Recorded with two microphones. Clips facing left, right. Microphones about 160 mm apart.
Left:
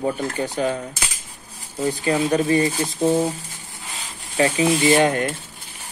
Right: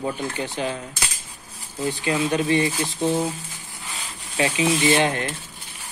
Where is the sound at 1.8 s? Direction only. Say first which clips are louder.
Left 3 dB; 35° left (ahead or behind).